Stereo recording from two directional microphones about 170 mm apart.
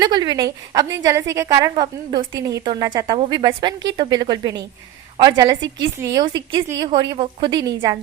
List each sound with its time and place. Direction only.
0.0 s a woman's voice: 25° right (ahead or behind)